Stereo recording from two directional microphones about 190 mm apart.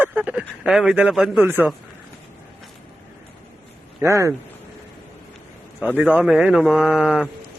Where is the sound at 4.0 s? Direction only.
15° right (ahead or behind).